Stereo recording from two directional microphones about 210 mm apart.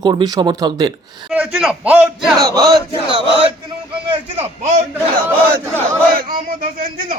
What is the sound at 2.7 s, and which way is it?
Speech, 25° right (ahead or behind).